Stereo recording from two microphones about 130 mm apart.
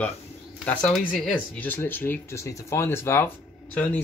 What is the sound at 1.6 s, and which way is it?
Speech, 15° left (ahead or behind).